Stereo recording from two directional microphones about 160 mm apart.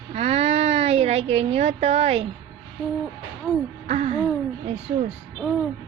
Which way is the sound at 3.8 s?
45° right (ahead or behind).